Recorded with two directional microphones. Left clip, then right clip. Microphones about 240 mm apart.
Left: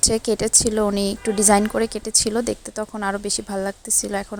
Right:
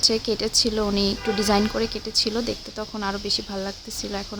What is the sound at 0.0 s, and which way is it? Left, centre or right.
Speech, left.